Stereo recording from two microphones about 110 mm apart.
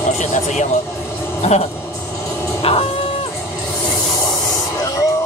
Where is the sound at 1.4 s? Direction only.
75° left (ahead or behind).